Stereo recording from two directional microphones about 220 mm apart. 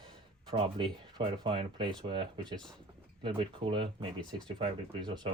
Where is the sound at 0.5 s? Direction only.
20° right (ahead or behind).